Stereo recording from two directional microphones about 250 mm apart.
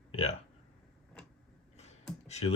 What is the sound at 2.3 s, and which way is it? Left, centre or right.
Speech, left.